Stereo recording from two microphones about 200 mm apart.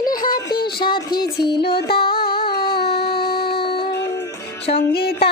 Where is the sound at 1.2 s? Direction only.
55° left (ahead or behind).